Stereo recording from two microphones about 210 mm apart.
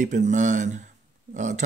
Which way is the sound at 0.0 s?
35° right (ahead or behind).